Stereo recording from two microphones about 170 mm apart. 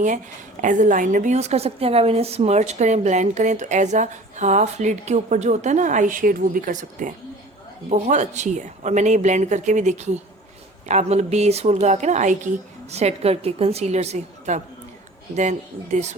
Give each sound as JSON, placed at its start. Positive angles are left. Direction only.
{"t": 0.6, "sound": "a woman's voice", "side_deg": -50}